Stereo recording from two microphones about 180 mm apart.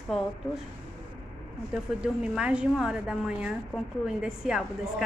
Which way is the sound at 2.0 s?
5° right (ahead or behind).